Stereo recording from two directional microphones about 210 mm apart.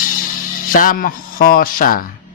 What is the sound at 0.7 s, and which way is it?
A man's voice, 40° left (ahead or behind).